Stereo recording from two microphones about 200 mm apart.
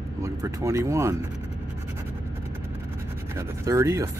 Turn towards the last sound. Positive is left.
turn(degrees=-15)  # may be behind; listen again after turning